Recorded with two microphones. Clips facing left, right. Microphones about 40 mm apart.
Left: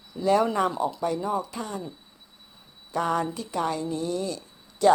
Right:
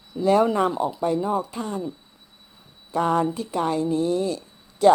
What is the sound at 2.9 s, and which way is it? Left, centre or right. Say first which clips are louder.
Speech: right 4 dB; centre.